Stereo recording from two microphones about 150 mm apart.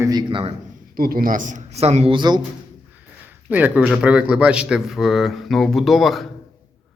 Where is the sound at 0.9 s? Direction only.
75° right (ahead or behind); by 2.4 s 30° right (ahead or behind).